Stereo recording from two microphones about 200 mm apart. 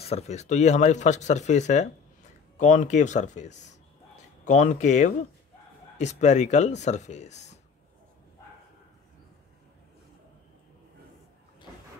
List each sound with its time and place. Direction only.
0.0 s speech: 30° left (ahead or behind)